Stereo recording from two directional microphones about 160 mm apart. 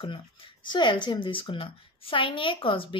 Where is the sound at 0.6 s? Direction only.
30° left (ahead or behind).